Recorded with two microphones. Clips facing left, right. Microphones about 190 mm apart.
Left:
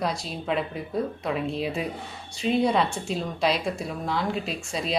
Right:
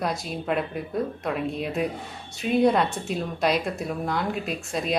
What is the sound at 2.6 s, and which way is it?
Speech, centre (ahead or behind).